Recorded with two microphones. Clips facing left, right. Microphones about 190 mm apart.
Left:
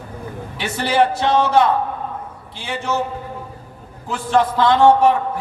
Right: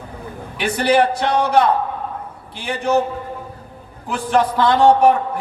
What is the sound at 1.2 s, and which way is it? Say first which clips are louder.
Speech: left 1 dB; 20° left (ahead or behind).